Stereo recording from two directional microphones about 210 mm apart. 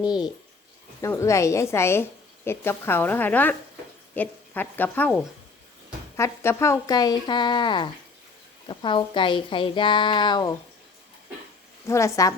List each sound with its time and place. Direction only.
1.0 s a woman's voice: 15° left (ahead or behind)
11.9 s a woman's voice: 15° left (ahead or behind)